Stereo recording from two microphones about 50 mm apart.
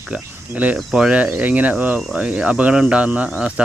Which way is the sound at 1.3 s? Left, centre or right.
Right.